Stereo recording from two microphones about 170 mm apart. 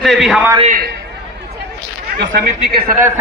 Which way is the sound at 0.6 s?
55° right (ahead or behind).